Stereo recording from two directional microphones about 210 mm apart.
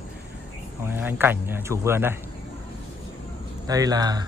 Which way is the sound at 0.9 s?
10° right (ahead or behind).